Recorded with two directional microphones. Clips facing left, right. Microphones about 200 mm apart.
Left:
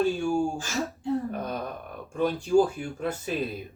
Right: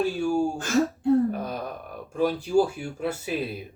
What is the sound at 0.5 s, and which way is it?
Speech, 60° right (ahead or behind).